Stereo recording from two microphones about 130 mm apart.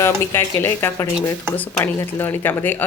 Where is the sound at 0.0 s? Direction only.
20° left (ahead or behind).